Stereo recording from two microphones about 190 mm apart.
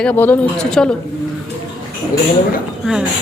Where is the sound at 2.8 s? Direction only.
5° right (ahead or behind).